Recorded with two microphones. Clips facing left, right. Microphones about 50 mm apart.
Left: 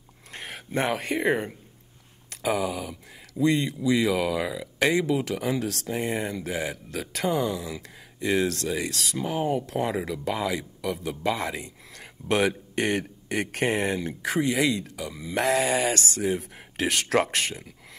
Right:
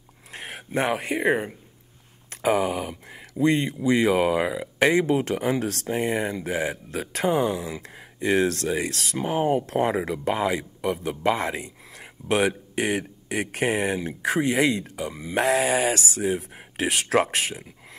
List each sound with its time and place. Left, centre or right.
0.3 s speech: centre
2.2 s speech: right
12.0 s speech: centre
14.2 s speech: right; by 17.6 s centre